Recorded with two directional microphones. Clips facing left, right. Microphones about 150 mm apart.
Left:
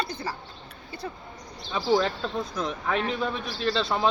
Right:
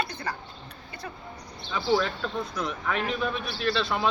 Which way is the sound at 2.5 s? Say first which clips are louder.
Left 3 dB; 30° left (ahead or behind).